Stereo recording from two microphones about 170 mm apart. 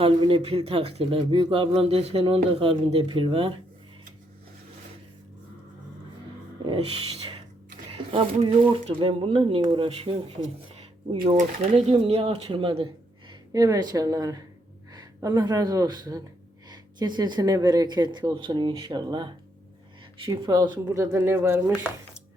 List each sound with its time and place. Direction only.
0.0 s speech: 30° right (ahead or behind)
6.7 s speech: 30° right (ahead or behind)
11.3 s speech: 35° right (ahead or behind); by 21.6 s 15° right (ahead or behind)